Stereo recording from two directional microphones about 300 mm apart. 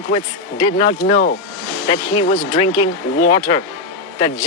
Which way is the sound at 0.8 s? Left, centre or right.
Centre.